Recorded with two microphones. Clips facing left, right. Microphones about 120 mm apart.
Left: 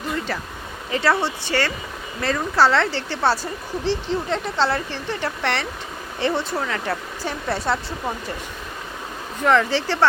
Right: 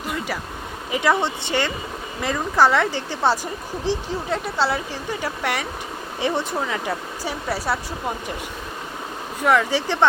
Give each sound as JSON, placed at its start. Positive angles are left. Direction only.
{"t": 0.9, "sound": "speech", "side_deg": -15}
{"t": 9.4, "sound": "speech", "side_deg": -10}